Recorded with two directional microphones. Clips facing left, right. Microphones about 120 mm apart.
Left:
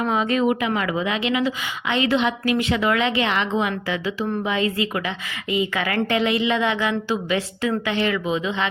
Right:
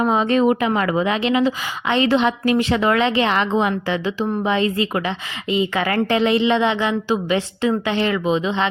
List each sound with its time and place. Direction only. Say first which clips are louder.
0.0 s a woman's voice: right 4 dB; 30° right (ahead or behind)